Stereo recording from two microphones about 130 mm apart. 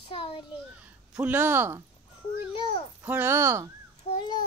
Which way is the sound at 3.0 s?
15° right (ahead or behind).